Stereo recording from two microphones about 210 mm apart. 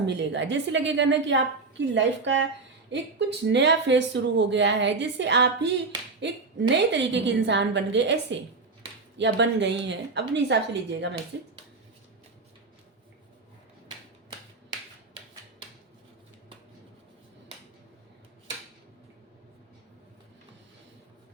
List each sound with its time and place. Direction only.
0.0 s speech: 55° right (ahead or behind)